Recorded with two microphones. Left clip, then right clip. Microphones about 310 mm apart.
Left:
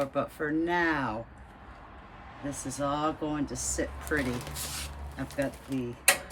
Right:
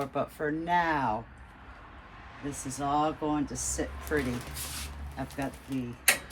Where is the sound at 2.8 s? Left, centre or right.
Centre.